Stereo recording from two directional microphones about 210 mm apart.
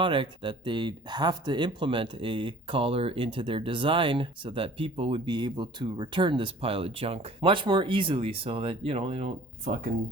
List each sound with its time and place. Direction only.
0.0 s speech: 25° right (ahead or behind)